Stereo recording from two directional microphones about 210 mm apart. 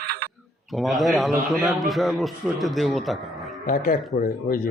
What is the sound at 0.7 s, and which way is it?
A man's voice, centre (ahead or behind).